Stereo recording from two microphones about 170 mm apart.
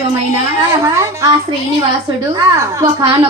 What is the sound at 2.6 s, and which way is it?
Speech, 20° right (ahead or behind).